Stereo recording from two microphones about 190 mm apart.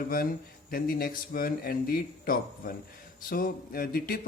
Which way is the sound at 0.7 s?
50° left (ahead or behind).